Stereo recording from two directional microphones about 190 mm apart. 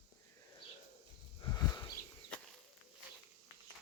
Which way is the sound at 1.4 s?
20° left (ahead or behind).